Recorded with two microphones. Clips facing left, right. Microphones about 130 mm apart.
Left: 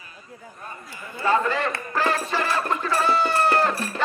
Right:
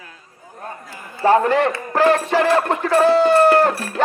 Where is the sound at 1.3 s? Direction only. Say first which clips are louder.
Right 7 dB; 65° right (ahead or behind).